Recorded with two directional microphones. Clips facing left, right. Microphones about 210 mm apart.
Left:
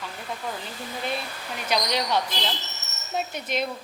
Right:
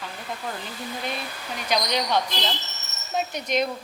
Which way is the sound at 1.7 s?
Centre (ahead or behind).